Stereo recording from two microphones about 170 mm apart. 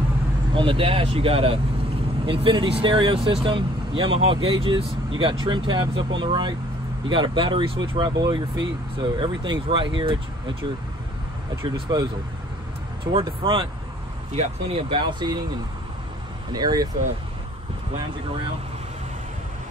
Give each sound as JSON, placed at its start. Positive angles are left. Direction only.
{"t": 0.5, "sound": "speech", "side_deg": -30}
{"t": 11.5, "sound": "speech", "side_deg": -25}
{"t": 16.5, "sound": "speech", "side_deg": -20}